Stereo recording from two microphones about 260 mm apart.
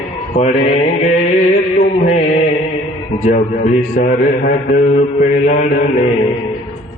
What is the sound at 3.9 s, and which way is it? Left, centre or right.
Mantra, left.